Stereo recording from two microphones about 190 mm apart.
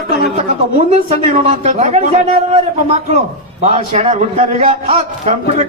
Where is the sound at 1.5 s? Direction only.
35° right (ahead or behind).